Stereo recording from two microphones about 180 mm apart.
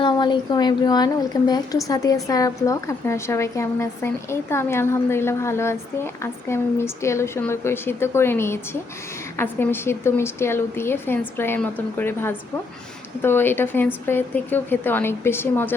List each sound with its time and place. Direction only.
0.0 s speech: 25° left (ahead or behind)